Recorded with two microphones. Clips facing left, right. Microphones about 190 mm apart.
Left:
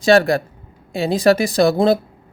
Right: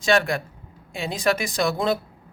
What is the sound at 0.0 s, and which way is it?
Speech, 35° left (ahead or behind).